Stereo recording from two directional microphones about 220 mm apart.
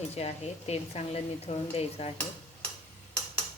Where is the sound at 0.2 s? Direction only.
30° left (ahead or behind).